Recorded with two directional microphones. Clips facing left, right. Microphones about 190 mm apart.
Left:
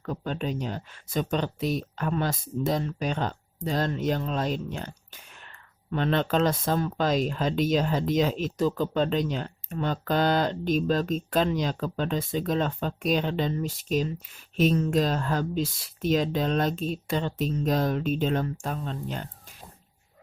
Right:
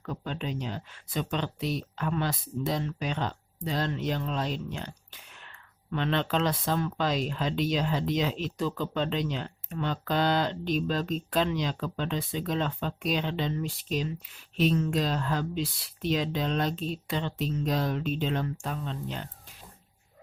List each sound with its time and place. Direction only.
0.0 s speech: 45° left (ahead or behind)